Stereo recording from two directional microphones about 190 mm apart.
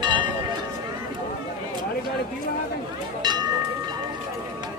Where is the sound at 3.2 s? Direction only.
20° right (ahead or behind).